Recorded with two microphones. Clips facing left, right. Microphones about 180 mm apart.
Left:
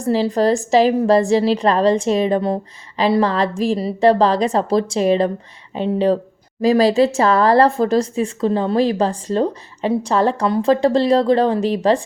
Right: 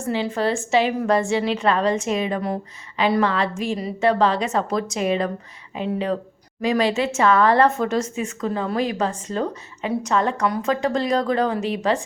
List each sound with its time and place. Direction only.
0.0 s speech: 35° left (ahead or behind)